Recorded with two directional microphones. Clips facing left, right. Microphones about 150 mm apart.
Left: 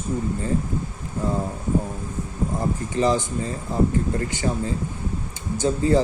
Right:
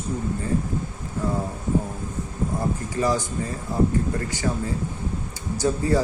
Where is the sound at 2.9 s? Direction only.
20° left (ahead or behind).